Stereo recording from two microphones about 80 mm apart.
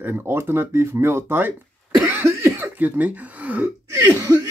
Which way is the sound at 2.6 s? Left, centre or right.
Right.